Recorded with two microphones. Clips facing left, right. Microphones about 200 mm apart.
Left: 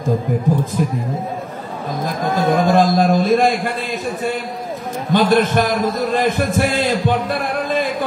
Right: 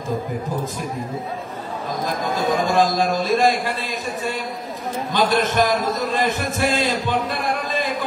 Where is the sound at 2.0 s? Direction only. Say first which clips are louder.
Left 4 dB; 55° left (ahead or behind).